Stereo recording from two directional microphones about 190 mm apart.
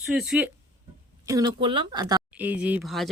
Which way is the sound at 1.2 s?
20° right (ahead or behind).